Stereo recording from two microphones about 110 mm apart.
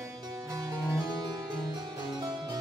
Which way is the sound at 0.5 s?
30° right (ahead or behind).